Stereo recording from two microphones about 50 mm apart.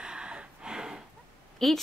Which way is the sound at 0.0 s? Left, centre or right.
Centre.